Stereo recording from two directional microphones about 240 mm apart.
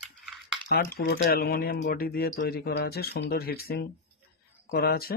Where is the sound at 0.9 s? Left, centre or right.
Left.